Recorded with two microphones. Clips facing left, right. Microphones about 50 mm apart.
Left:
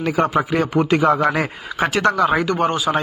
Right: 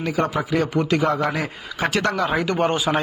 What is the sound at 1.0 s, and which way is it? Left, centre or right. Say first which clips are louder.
Speech: left 5 dB; left.